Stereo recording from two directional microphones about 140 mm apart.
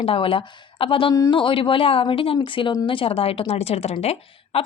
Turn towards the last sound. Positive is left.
turn(degrees=45)  # may be behind; listen again after turning